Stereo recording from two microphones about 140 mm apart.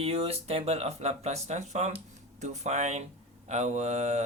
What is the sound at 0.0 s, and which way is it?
Speech, 45° right (ahead or behind).